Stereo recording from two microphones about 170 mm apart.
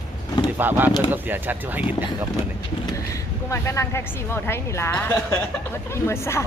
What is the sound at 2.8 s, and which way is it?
Speech, 20° left (ahead or behind).